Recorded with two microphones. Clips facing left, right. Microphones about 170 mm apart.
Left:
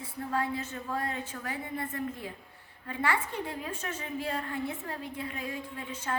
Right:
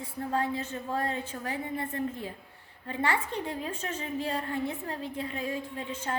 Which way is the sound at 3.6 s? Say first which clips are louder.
Right 2 dB; 30° right (ahead or behind).